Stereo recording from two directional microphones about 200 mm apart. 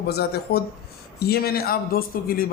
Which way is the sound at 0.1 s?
50° left (ahead or behind).